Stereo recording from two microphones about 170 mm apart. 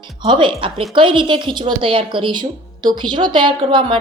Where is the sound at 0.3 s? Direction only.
30° right (ahead or behind).